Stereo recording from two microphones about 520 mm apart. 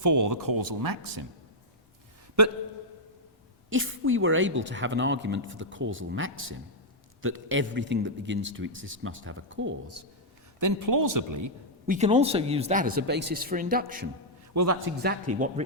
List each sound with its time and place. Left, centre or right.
0.0 s speech: right
2.4 s speech: right
3.7 s a woman's voice: right
10.6 s speech: right
11.9 s speech: centre
14.5 s a man's voice: right
15.0 s speech: centre